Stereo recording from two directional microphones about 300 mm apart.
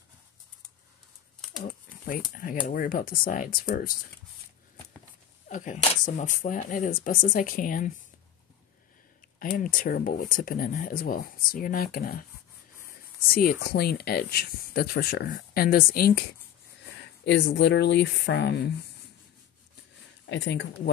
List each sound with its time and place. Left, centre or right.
1.6 s a sound: left
2.7 s speech: left
5.5 s speech: left
9.4 s speech: left
13.3 s speech: left
20.2 s speech: left